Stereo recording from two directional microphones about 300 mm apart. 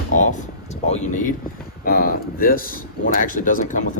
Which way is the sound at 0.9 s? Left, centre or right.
Left.